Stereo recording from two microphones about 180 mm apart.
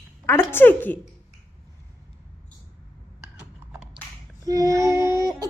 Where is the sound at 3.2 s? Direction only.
5° right (ahead or behind).